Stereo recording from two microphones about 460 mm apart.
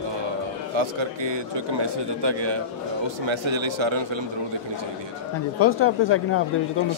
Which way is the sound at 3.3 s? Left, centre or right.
Right.